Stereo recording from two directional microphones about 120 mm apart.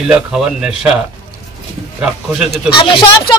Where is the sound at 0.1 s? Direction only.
10° right (ahead or behind).